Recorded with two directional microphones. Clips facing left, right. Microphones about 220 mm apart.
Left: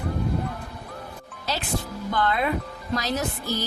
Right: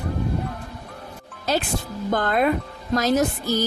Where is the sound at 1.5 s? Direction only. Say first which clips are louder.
Right 5 dB; 50° right (ahead or behind).